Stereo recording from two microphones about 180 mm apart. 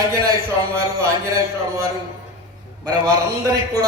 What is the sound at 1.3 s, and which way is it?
A man's voice, 20° right (ahead or behind).